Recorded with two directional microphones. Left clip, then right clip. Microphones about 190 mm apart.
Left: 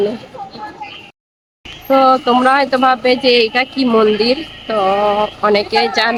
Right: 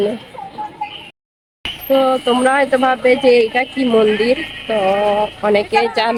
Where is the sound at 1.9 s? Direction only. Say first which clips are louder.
Left 4 dB; 20° left (ahead or behind).